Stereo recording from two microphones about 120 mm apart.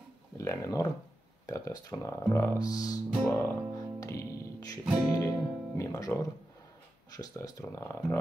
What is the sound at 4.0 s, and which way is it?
Music, 30° left (ahead or behind).